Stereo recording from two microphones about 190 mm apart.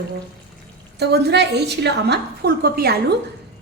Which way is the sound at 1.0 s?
60° right (ahead or behind).